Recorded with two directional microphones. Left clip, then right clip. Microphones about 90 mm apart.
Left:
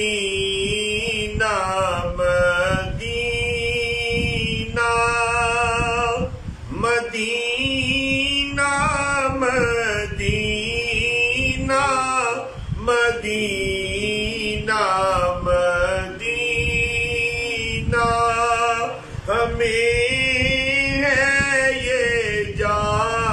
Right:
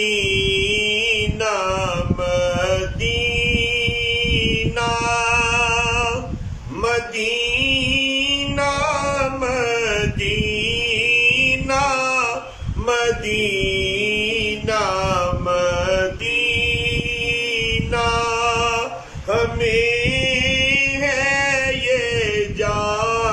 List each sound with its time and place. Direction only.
0.0 s music: 30° right (ahead or behind)
3.4 s mantra: 25° right (ahead or behind)
6.8 s music: 30° right (ahead or behind)
12.8 s a sound: 30° right (ahead or behind)
14.0 s mantra: 30° right (ahead or behind)
17.9 s male singing: 25° right (ahead or behind)
19.3 s chant: 30° right (ahead or behind)